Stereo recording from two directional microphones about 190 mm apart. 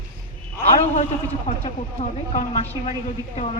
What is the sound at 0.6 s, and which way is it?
Speech, 35° left (ahead or behind).